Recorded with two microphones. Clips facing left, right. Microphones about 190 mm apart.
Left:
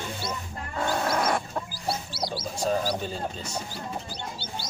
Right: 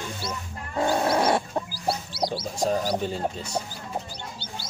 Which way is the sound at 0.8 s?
30° right (ahead or behind).